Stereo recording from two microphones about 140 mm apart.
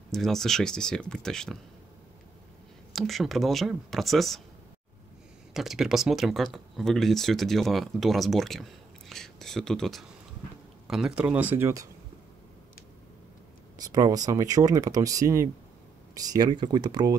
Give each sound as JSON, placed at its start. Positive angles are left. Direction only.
{"t": 0.1, "sound": "speech", "side_deg": 5}
{"t": 2.9, "sound": "speech", "side_deg": 0}
{"t": 5.5, "sound": "speech", "side_deg": 0}
{"t": 13.7, "sound": "speech", "side_deg": -25}